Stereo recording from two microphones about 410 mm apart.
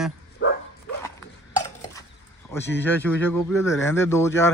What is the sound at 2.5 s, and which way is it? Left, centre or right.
Speech, centre.